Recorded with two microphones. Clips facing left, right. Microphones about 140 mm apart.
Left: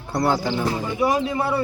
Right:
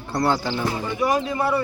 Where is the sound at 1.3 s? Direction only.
20° left (ahead or behind).